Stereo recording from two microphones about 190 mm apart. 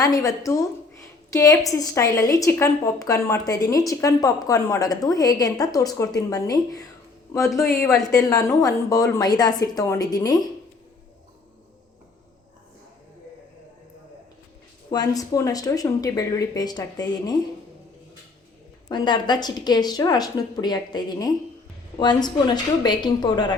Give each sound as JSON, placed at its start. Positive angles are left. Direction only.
{"t": 0.0, "sound": "a woman's voice", "side_deg": 20}
{"t": 14.8, "sound": "speech", "side_deg": 20}
{"t": 18.9, "sound": "speech", "side_deg": 20}